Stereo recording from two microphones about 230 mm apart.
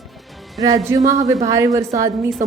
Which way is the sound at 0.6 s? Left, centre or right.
Centre.